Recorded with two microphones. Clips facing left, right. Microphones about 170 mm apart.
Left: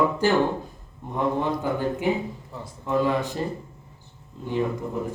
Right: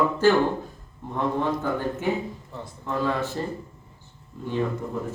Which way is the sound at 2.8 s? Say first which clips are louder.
Left 3 dB; 15° left (ahead or behind).